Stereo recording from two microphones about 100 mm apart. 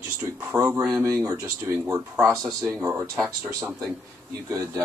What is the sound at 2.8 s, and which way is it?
Speech, 25° right (ahead or behind).